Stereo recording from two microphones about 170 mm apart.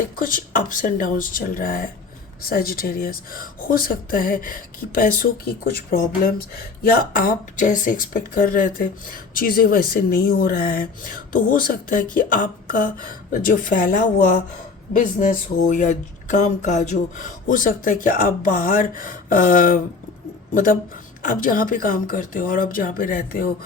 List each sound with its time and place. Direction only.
0.2 s speech: 55° left (ahead or behind)